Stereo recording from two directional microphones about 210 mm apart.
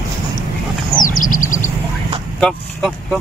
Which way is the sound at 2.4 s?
5° left (ahead or behind).